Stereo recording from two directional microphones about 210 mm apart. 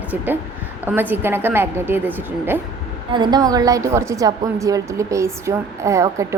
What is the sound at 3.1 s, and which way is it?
A woman's voice, 20° right (ahead or behind).